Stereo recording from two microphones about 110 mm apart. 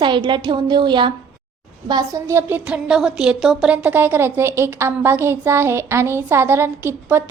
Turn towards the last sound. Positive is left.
turn(degrees=-20)  # may be behind; listen again after turning